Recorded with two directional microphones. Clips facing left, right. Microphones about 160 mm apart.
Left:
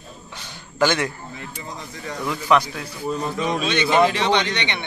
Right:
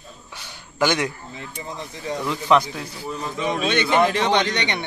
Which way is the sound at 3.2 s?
35° left (ahead or behind).